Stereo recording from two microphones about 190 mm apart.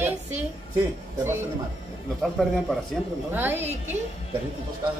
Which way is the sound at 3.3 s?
10° right (ahead or behind).